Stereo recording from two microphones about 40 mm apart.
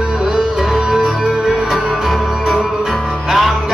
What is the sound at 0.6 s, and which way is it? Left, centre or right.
Music, centre.